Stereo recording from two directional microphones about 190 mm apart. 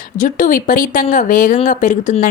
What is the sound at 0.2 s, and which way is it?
A woman's voice, 45° left (ahead or behind).